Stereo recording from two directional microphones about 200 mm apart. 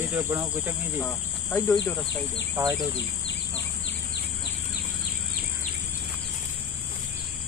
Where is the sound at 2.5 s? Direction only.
20° right (ahead or behind).